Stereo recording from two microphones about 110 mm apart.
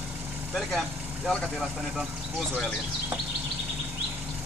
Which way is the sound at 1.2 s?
Centre (ahead or behind).